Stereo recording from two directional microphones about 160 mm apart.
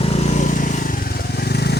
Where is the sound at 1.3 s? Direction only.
85° left.